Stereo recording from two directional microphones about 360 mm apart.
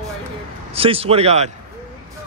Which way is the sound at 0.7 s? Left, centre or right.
Centre.